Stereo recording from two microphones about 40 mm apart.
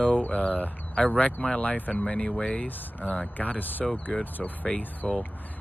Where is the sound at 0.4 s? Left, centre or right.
Left.